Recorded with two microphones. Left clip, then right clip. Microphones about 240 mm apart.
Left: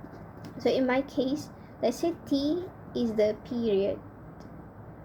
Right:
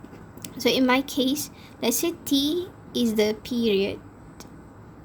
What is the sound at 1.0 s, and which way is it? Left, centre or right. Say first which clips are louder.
A woman's voice: right 4 dB; right.